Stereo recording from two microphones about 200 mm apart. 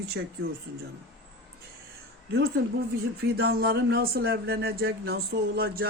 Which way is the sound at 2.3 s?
50° right (ahead or behind).